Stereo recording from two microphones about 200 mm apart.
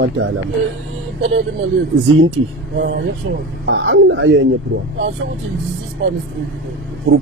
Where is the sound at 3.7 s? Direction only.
85° right.